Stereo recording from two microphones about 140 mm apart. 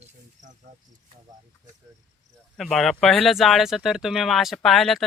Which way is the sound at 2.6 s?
Centre (ahead or behind).